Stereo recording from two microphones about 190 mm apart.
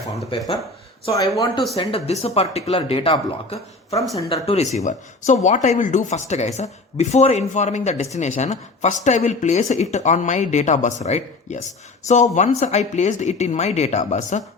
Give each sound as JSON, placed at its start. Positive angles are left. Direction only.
{"t": 0.1, "sound": "speech", "side_deg": 25}
{"t": 1.7, "sound": "speech", "side_deg": 30}